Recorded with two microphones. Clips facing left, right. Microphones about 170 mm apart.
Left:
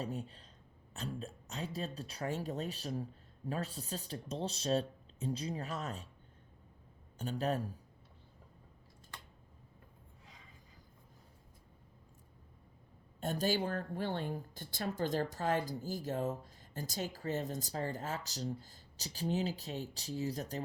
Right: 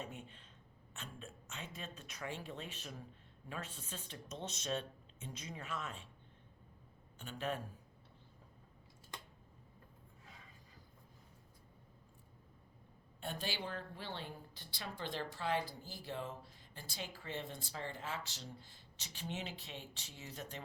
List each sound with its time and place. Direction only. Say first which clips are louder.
0.0 s a woman's voice: left 8 dB; 35° left (ahead or behind)
7.2 s a woman's voice: left 6 dB; 40° left (ahead or behind)
13.1 s a woman's voice: left 9 dB; 40° left (ahead or behind)